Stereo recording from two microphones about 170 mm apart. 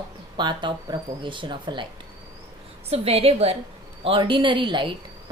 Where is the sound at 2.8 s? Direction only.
35° right (ahead or behind).